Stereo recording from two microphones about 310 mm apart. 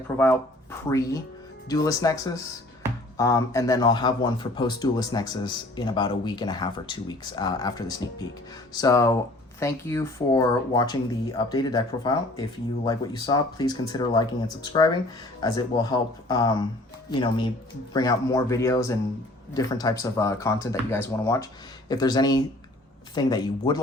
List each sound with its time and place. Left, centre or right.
0.9 s speech: centre